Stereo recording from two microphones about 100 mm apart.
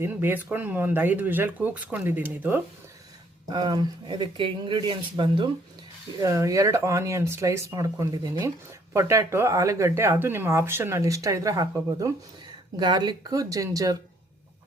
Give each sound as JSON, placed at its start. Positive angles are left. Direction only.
{"t": 0.0, "sound": "speech", "side_deg": -20}
{"t": 3.5, "sound": "speech", "side_deg": -45}
{"t": 6.1, "sound": "speech", "side_deg": -30}
{"t": 8.4, "sound": "speech", "side_deg": -30}
{"t": 12.8, "sound": "speech", "side_deg": -45}